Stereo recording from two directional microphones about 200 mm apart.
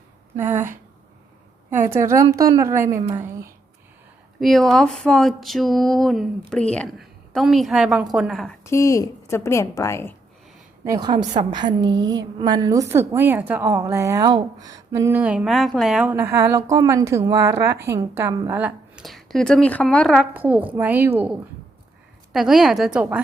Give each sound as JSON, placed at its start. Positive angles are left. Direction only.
{"t": 0.3, "sound": "a woman's voice", "side_deg": -10}
{"t": 2.0, "sound": "a woman's voice", "side_deg": -15}
{"t": 4.4, "sound": "speech", "side_deg": 0}
{"t": 8.6, "sound": "speech", "side_deg": 15}
{"t": 10.8, "sound": "a woman's voice", "side_deg": -20}
{"t": 20.3, "sound": "a woman's voice", "side_deg": -10}